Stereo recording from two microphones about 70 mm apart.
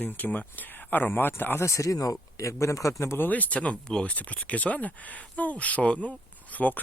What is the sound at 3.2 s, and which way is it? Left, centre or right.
Speech, left.